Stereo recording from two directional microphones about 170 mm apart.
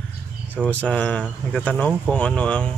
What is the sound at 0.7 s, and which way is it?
Speech, 10° left (ahead or behind).